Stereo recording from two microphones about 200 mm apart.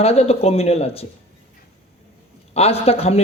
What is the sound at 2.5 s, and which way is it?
Speech, 30° left (ahead or behind).